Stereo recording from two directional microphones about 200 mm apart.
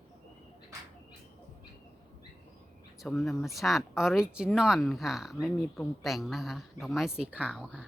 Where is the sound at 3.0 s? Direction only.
Centre (ahead or behind).